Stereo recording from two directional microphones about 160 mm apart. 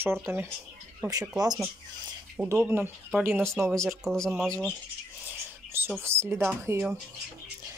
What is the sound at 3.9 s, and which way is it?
Speech, 5° left (ahead or behind).